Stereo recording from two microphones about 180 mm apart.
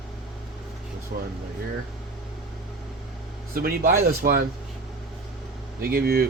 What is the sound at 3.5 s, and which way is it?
Speech, 55° right (ahead or behind).